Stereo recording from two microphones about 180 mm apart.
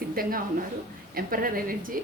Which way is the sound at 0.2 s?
55° right (ahead or behind).